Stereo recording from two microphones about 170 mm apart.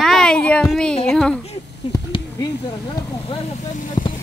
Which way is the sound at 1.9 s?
20° left (ahead or behind).